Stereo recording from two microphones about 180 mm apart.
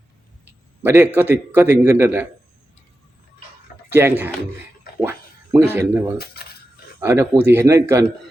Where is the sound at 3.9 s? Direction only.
10° right (ahead or behind).